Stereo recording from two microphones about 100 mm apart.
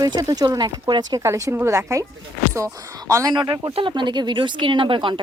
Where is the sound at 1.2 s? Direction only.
30° right (ahead or behind).